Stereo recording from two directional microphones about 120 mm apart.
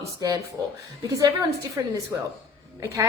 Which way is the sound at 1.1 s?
30° right (ahead or behind).